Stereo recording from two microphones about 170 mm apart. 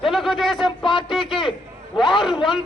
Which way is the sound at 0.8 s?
30° left (ahead or behind).